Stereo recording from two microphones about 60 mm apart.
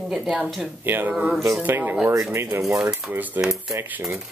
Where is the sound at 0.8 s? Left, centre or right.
Right.